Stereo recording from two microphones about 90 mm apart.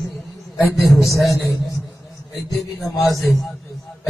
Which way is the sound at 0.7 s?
Centre (ahead or behind).